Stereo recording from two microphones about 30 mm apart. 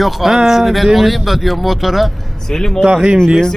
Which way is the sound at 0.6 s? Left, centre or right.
Centre.